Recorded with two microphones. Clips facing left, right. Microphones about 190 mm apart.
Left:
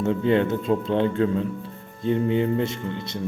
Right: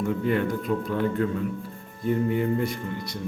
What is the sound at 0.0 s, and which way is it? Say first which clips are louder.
Speech: left 4 dB; 25° left (ahead or behind).